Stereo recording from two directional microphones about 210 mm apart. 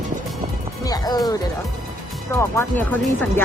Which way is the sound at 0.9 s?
20° left (ahead or behind).